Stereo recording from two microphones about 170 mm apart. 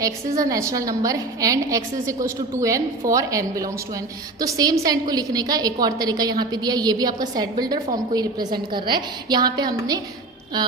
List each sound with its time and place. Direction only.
0.0 s a woman's voice: 20° right (ahead or behind)